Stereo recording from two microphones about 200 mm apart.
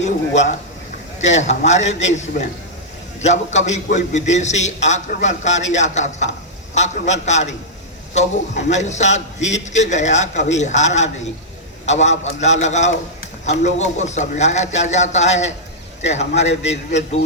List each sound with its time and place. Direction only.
0.0 s a man's voice: 35° left (ahead or behind)
3.2 s a man's voice: 35° left (ahead or behind)